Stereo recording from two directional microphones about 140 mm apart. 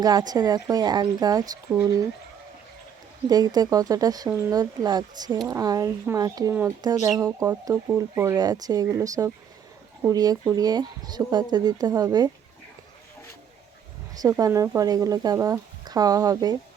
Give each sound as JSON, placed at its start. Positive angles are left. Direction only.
{"t": 0.0, "sound": "speech", "side_deg": -30}
{"t": 3.2, "sound": "speech", "side_deg": -30}
{"t": 6.5, "sound": "speech", "side_deg": -15}
{"t": 6.8, "sound": "speech", "side_deg": -25}
{"t": 14.2, "sound": "speech", "side_deg": -25}